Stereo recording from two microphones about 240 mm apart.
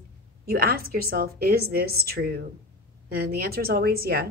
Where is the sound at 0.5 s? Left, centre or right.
Right.